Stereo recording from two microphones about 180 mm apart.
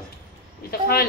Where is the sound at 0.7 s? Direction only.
60° left (ahead or behind).